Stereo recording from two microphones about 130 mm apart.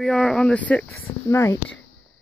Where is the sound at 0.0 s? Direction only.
5° left (ahead or behind).